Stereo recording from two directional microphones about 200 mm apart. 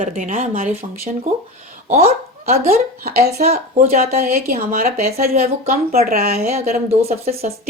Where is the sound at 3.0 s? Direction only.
50° right (ahead or behind).